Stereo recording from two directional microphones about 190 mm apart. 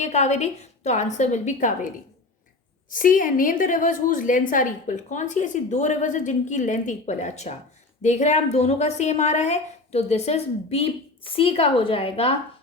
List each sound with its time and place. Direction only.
0.0 s a woman's voice: 35° left (ahead or behind)
2.9 s a woman's voice: 45° left (ahead or behind)